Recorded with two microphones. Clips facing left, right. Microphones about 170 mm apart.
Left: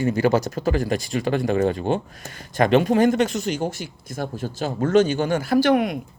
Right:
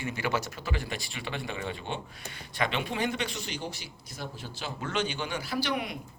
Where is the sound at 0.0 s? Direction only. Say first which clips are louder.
Left 12 dB; 40° left (ahead or behind).